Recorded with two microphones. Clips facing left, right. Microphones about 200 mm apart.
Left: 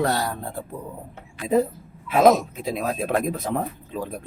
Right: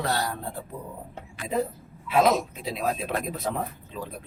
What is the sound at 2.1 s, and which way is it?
Speech, 50° left (ahead or behind).